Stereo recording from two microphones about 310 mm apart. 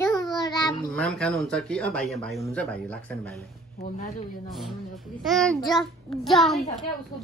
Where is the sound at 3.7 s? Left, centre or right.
Left.